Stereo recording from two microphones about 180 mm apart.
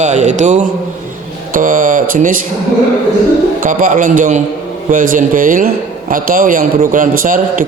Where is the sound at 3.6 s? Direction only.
45° right (ahead or behind).